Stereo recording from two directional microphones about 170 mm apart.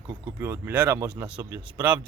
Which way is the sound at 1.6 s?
10° right (ahead or behind).